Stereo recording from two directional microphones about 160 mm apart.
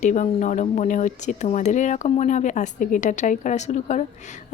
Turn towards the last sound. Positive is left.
turn(degrees=45)  # may be behind; listen again after turning